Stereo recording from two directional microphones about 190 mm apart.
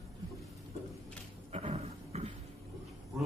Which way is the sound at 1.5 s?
35° right (ahead or behind).